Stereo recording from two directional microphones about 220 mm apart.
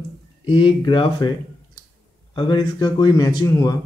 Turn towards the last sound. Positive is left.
turn(degrees=15)  # may be behind; listen again after turning